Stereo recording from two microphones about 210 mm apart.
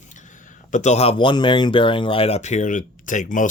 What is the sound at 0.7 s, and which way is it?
Speech, 35° left (ahead or behind).